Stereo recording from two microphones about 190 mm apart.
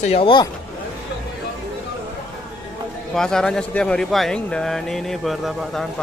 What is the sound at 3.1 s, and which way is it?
Speech, 5° left (ahead or behind).